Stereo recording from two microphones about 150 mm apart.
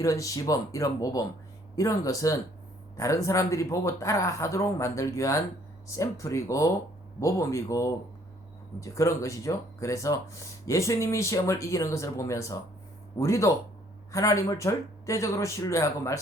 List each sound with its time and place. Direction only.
0.0 s speech: 20° left (ahead or behind)